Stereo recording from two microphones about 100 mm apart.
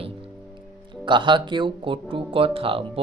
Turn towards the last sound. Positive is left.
turn(degrees=-70)  # may be behind; listen again after turning